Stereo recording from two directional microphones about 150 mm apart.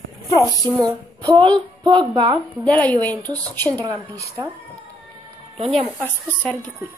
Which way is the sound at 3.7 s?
25° right (ahead or behind).